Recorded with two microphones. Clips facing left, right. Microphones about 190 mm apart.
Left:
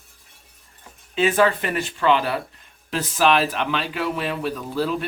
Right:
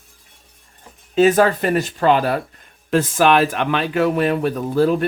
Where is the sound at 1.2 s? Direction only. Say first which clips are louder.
Right 5 dB; 40° right (ahead or behind).